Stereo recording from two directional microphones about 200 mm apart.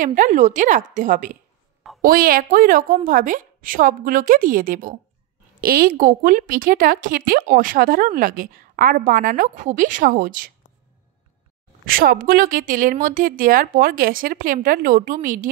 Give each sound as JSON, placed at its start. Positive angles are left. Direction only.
{"t": 0.0, "sound": "a woman's voice", "side_deg": -40}
{"t": 11.8, "sound": "a woman's voice", "side_deg": -45}